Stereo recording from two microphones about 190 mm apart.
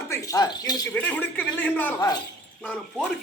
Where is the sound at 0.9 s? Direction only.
10° left (ahead or behind).